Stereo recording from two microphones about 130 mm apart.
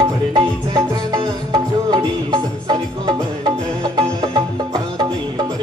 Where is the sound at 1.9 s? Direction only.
30° right (ahead or behind).